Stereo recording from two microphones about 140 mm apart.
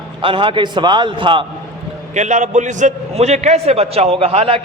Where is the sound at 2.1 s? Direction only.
60° right (ahead or behind).